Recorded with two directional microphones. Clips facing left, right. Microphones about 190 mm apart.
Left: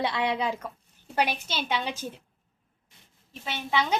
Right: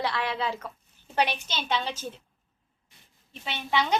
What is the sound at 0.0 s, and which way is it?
Speech, 20° left (ahead or behind).